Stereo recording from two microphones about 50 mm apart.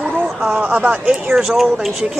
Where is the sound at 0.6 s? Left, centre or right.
Right.